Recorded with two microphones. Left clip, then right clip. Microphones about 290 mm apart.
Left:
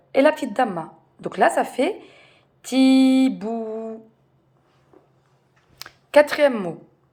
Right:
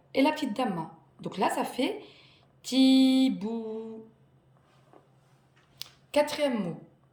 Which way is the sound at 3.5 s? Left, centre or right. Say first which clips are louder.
Left 8 dB; centre.